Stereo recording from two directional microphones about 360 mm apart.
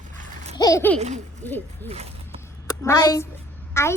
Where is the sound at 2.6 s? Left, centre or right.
Centre.